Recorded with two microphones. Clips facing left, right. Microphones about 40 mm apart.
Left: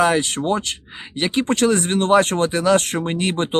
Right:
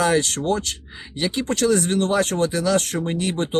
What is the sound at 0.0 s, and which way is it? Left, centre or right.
Speech, left.